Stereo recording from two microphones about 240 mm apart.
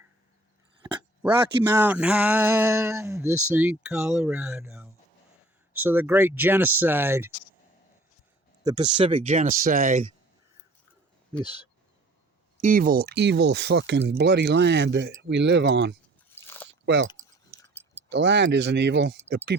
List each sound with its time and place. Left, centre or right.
1.7 s speech: centre
8.6 s speech: centre
12.6 s speech: right
16.3 s biting: centre
16.8 s speech: right
18.1 s speech: right